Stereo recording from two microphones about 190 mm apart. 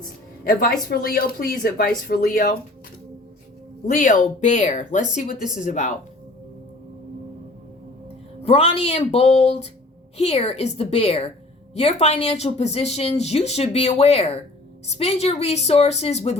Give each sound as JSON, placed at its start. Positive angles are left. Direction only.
{"t": 0.4, "sound": "speech", "side_deg": 50}
{"t": 3.8, "sound": "speech", "side_deg": 45}
{"t": 8.4, "sound": "speech", "side_deg": 30}